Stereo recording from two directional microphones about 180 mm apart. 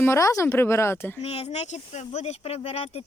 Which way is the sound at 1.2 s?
35° left (ahead or behind).